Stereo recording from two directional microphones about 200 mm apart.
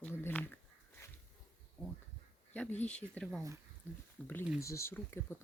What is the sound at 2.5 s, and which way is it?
Speech, 10° left (ahead or behind).